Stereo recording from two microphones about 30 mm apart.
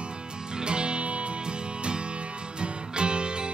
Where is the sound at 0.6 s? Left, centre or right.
Right.